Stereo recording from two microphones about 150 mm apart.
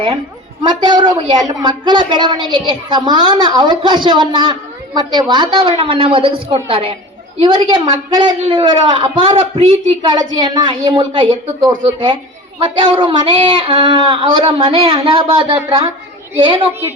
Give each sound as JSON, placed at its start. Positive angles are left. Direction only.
{"t": 0.6, "sound": "a woman's voice", "side_deg": -30}
{"t": 12.5, "sound": "a man's voice", "side_deg": -35}